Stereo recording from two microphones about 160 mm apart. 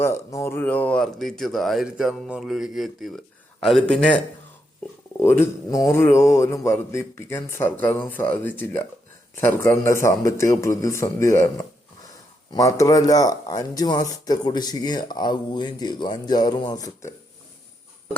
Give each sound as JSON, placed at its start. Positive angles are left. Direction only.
{"t": 0.0, "sound": "speech", "side_deg": 15}
{"t": 5.2, "sound": "a man's voice", "side_deg": 15}